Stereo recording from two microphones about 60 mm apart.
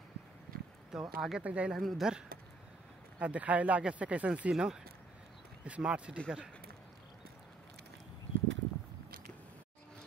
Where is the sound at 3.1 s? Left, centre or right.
Right.